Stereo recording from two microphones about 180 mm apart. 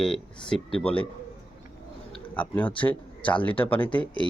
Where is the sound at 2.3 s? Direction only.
10° left (ahead or behind).